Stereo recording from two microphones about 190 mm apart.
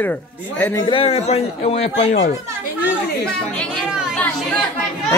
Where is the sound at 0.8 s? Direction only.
30° left (ahead or behind).